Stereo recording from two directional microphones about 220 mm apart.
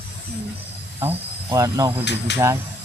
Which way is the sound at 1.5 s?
15° right (ahead or behind).